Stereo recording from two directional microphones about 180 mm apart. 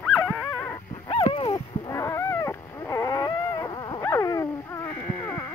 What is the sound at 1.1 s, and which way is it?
Dog, 30° left (ahead or behind).